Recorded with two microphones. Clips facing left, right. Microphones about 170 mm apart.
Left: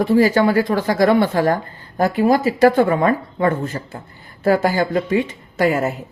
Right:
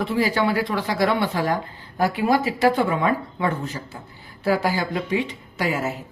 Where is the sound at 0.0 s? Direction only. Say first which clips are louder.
Left 7 dB; 45° left (ahead or behind).